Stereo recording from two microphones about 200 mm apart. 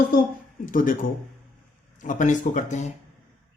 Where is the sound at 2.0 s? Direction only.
40° left (ahead or behind).